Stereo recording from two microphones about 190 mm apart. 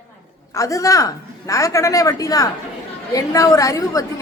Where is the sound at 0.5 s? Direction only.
15° left (ahead or behind).